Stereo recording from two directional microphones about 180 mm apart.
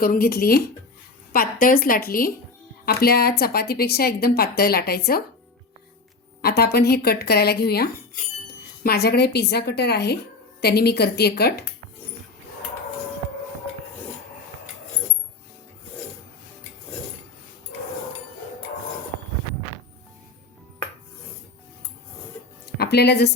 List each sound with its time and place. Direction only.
0.0 s a woman's voice: 55° left (ahead or behind)
6.4 s a woman's voice: 65° left (ahead or behind)
22.8 s a woman's voice: 65° left (ahead or behind)